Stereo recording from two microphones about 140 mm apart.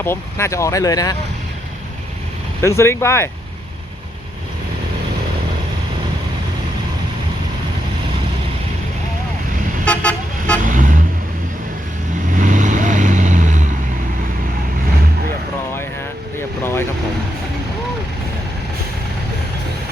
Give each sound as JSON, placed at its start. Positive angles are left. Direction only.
{"t": 0.0, "sound": "speech", "side_deg": 20}
{"t": 2.6, "sound": "speech", "side_deg": 20}
{"t": 9.8, "sound": "vehicle", "side_deg": 10}
{"t": 10.6, "sound": "vehicle", "side_deg": -70}
{"t": 12.4, "sound": "vehicle", "side_deg": -65}